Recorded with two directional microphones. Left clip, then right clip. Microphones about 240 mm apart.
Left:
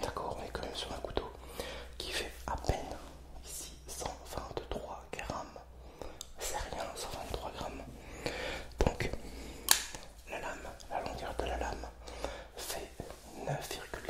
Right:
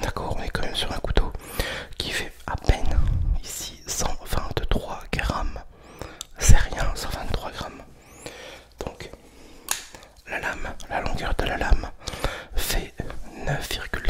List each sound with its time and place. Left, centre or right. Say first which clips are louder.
0.0 s whispering: right 8 dB; right
4.0 s whispering: right 10 dB; right
8.2 s a sound: left 1 dB; centre
10.2 s whispering: right 13 dB; right